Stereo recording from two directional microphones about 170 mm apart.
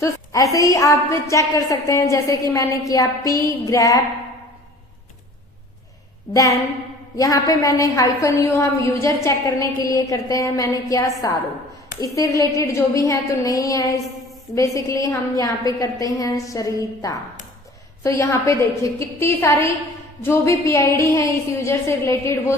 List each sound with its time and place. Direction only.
0.5 s a woman's voice: 20° left (ahead or behind)
7.2 s a woman's voice: 20° left (ahead or behind)